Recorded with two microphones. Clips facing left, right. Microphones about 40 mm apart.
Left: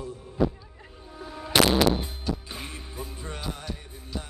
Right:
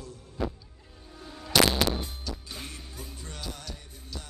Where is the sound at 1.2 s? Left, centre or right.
Left.